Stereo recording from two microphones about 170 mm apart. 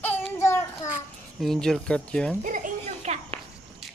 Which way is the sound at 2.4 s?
50° right (ahead or behind).